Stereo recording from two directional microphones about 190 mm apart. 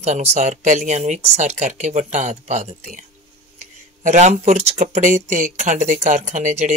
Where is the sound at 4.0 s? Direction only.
40° right (ahead or behind).